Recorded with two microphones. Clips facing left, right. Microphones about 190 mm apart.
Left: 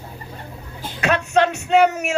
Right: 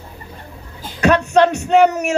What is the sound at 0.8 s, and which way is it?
Speech, 40° right (ahead or behind).